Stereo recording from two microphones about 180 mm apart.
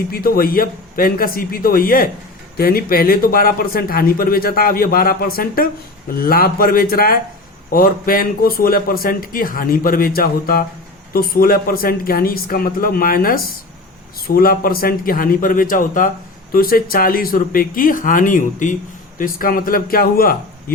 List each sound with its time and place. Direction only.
0.1 s a man's voice: 55° left (ahead or behind)